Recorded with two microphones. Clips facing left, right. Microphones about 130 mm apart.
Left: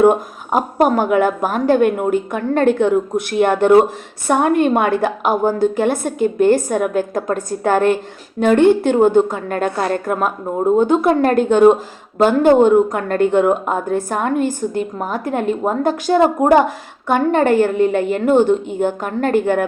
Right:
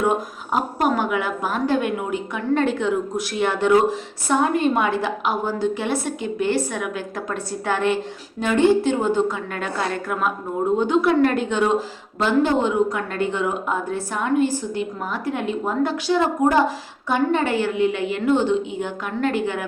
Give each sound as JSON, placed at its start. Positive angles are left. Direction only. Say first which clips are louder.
{"t": 0.0, "sound": "a woman's voice", "louder": "left 9 dB", "side_deg": 50}